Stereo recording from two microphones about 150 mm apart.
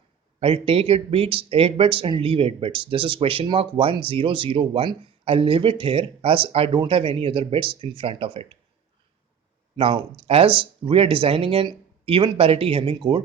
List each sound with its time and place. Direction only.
0.3 s speech: 40° right (ahead or behind)
9.7 s speech: 35° right (ahead or behind)